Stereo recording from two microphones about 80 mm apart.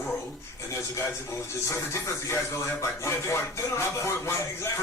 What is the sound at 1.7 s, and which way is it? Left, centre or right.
Speech, left.